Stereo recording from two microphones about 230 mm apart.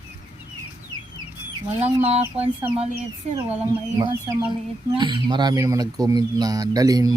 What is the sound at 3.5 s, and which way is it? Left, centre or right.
Speech, centre.